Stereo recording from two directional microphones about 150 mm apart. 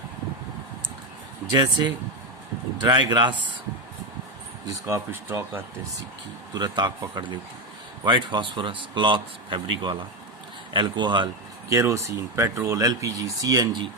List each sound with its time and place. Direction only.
1.5 s speech: 30° right (ahead or behind)
4.7 s speech: 20° right (ahead or behind)
6.5 s speech: 30° right (ahead or behind)
11.7 s speech: 20° right (ahead or behind)